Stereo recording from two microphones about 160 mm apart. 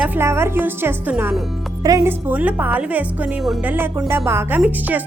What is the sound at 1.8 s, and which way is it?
Speech, 20° right (ahead or behind).